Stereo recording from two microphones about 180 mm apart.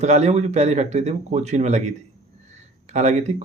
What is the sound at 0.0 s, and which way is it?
Speech, 40° right (ahead or behind).